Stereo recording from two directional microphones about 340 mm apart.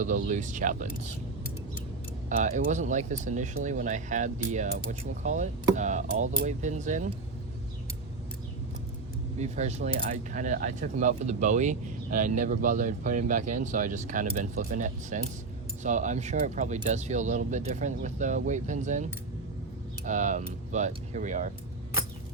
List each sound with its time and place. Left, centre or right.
0.0 s speech: right
2.3 s speech: right
9.4 s speech: centre
20.1 s speech: right